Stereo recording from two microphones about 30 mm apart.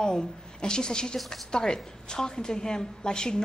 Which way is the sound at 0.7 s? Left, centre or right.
Left.